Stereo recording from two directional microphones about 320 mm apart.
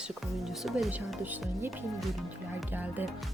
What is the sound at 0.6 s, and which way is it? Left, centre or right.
Speech, centre.